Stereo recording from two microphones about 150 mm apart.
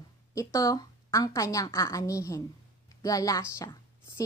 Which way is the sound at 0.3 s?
20° left (ahead or behind).